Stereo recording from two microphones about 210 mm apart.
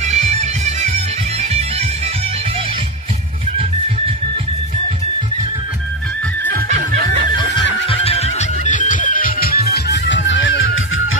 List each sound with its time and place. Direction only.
0.0 s music: 35° right (ahead or behind)
6.5 s snicker: 40° right (ahead or behind)
7.9 s music: 30° left (ahead or behind); by 11.1 s 65° left (ahead or behind)